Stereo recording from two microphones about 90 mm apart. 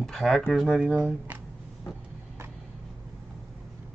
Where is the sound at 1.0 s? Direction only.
15° right (ahead or behind).